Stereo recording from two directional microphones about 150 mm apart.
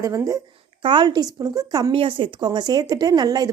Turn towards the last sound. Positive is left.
turn(degrees=-25)  # may be behind; listen again after turning